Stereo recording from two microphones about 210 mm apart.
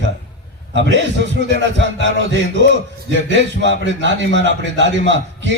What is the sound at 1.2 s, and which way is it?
A man's voice, 55° right (ahead or behind).